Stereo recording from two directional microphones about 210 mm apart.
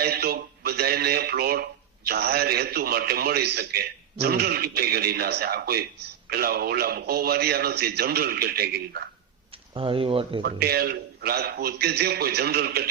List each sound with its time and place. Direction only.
0.0 s a man's voice: 45° right (ahead or behind)
9.7 s speech: 25° right (ahead or behind)
10.4 s a man's voice: 50° right (ahead or behind)